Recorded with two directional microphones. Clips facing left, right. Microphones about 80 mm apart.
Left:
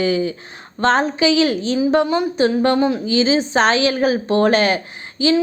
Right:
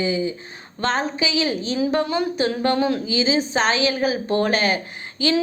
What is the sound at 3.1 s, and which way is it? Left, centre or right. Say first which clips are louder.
A woman's voice: left 4 dB; left.